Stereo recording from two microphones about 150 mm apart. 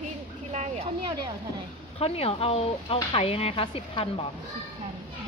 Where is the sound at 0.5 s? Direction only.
45° right (ahead or behind).